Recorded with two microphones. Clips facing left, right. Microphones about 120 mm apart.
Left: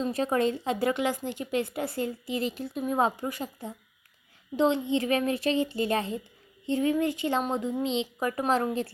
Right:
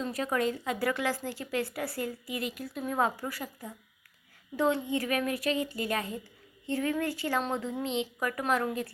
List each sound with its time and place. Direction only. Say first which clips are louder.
0.0 s speech: left 4 dB; 25° left (ahead or behind)